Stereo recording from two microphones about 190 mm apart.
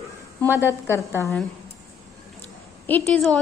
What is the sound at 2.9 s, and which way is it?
Speech, 10° left (ahead or behind).